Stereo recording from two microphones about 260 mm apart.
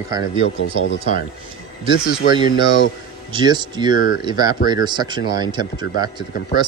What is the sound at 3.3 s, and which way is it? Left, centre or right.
Speech, centre.